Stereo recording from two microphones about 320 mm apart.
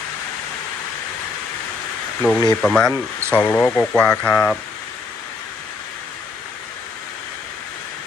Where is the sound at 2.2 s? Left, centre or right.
Centre.